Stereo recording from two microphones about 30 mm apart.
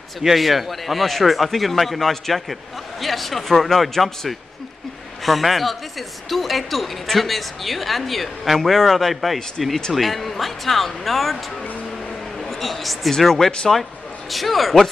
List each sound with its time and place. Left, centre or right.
0.2 s speech: centre
12.4 s a woman's voice: centre
14.3 s speech: centre